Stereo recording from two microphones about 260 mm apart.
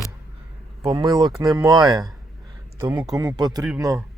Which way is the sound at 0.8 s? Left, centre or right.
Centre.